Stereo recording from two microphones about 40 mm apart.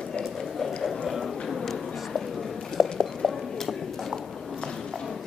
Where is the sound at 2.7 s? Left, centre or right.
Centre.